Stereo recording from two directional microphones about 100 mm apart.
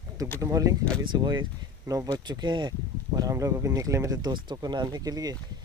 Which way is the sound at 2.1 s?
50° right (ahead or behind).